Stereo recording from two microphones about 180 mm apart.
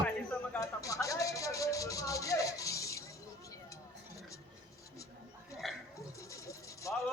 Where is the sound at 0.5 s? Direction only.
20° left (ahead or behind).